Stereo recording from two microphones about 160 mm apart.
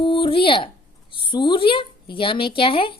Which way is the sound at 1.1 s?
30° left (ahead or behind).